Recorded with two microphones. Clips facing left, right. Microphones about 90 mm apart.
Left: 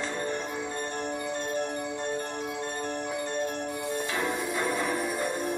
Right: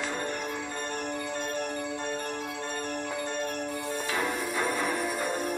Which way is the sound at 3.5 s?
20° left (ahead or behind).